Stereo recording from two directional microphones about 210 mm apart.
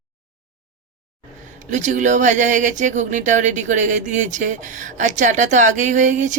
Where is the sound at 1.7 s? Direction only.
35° right (ahead or behind).